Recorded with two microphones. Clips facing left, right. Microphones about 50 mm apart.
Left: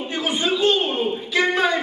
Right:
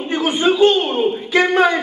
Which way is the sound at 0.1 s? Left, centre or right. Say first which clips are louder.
Right 7 dB; right.